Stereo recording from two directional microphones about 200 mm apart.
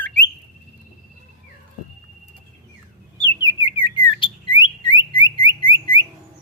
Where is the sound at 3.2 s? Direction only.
20° left (ahead or behind).